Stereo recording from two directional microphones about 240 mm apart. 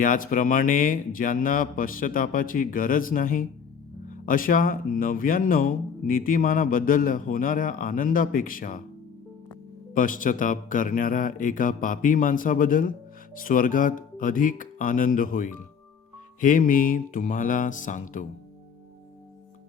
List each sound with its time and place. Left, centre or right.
0.0 s speech: left
9.9 s speech: left